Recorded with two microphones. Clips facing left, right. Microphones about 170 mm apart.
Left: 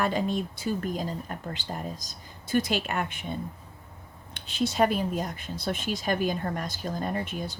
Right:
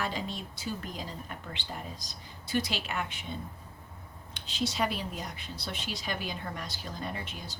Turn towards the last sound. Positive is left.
turn(degrees=50)  # may be behind; listen again after turning